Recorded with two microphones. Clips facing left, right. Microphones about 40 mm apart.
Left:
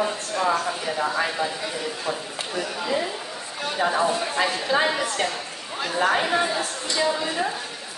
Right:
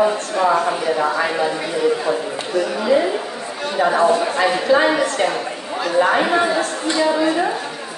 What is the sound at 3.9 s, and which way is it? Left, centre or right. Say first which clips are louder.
Speech: right 9 dB; right.